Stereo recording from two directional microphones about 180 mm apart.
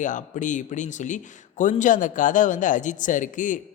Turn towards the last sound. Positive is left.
turn(degrees=45)  # may be behind; listen again after turning